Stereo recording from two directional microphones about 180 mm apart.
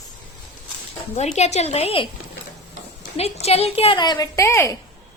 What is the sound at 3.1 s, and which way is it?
A woman's voice, 35° left (ahead or behind).